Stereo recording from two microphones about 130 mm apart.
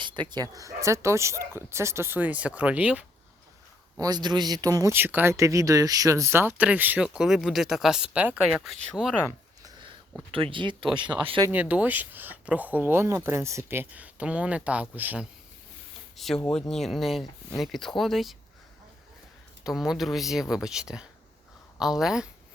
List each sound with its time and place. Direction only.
0.0 s speech: 35° right (ahead or behind); by 3.1 s 10° right (ahead or behind)
3.9 s speech: 30° right (ahead or behind)
4.9 s speech: 15° right (ahead or behind)
10.3 s speech: 40° right (ahead or behind)
11.5 s speech: 10° right (ahead or behind)
16.1 s speech: centre (ahead or behind)
19.6 s speech: 5° right (ahead or behind)